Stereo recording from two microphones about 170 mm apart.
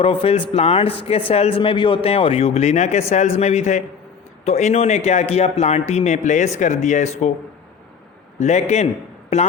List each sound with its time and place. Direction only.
0.0 s speech: 30° left (ahead or behind)
8.4 s speech: 45° left (ahead or behind)